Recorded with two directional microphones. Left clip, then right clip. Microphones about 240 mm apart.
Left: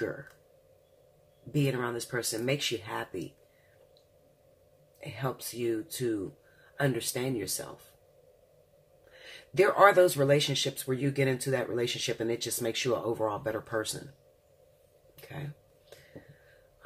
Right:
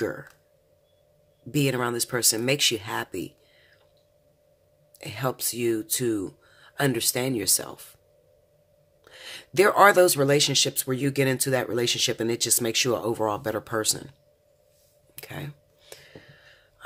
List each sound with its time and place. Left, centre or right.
0.0 s speech: right
1.5 s speech: right
5.0 s speech: right
9.1 s speech: right
15.1 s speech: right